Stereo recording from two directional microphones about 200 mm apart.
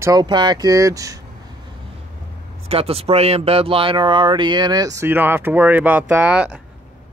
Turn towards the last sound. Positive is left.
turn(degrees=-5)  # may be behind; listen again after turning